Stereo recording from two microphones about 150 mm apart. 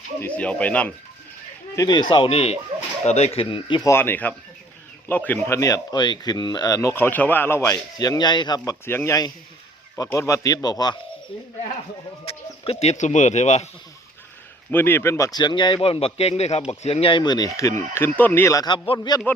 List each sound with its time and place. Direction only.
0.2 s speech: 10° left (ahead or behind)
1.7 s speech: 25° left (ahead or behind)
3.8 s speech: 20° left (ahead or behind)
8.9 s speech: 15° left (ahead or behind)
12.2 s speech: 40° left (ahead or behind)
14.7 s speech: 15° left (ahead or behind)